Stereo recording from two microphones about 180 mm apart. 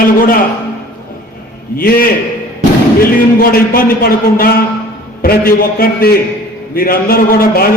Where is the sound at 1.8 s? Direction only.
55° left (ahead or behind).